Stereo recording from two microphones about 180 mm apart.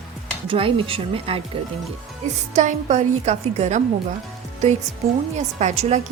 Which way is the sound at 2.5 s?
40° right (ahead or behind).